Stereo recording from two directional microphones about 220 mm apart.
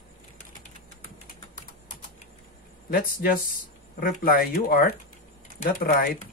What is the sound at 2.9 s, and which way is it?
Speech, 40° left (ahead or behind).